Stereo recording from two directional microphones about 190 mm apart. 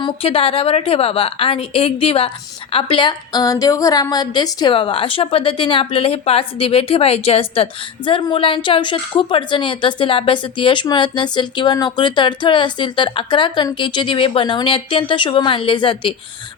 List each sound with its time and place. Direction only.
0.0 s a woman's voice: 30° left (ahead or behind)